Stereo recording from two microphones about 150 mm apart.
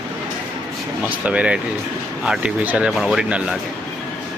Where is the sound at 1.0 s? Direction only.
10° right (ahead or behind).